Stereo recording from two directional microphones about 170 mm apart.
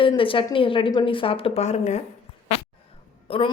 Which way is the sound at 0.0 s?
30° left (ahead or behind).